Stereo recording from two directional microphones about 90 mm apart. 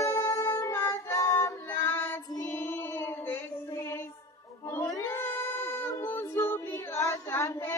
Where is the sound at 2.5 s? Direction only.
25° left (ahead or behind).